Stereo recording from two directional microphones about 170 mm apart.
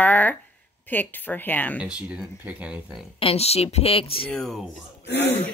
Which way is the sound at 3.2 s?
35° left (ahead or behind).